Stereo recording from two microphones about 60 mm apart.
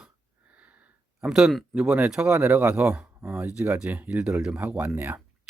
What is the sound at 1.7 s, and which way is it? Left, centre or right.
Speech, centre.